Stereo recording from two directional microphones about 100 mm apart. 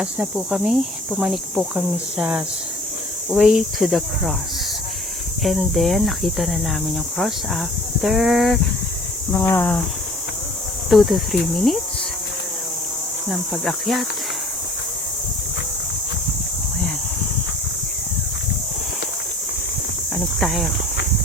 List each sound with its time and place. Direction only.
0.0 s speech: 10° right (ahead or behind)
5.4 s speech: centre (ahead or behind)
9.3 s speech: 30° left (ahead or behind)
10.8 s speech: centre (ahead or behind)
13.2 s speech: 5° left (ahead or behind)
20.1 s speech: centre (ahead or behind)